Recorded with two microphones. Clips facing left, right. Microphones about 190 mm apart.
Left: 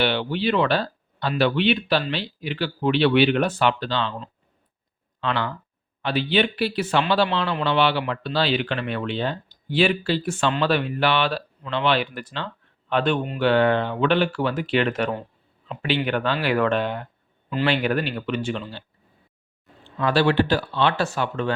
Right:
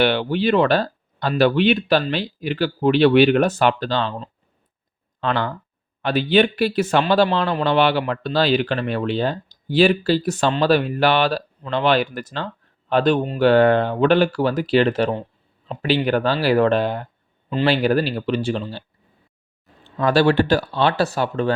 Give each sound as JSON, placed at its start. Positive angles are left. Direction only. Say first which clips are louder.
{"t": 0.0, "sound": "speech", "louder": "right 4 dB", "side_deg": -50}
{"t": 20.0, "sound": "speech", "louder": "right 3 dB", "side_deg": -45}